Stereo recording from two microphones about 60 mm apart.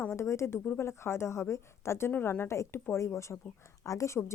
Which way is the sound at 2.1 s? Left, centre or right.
Left.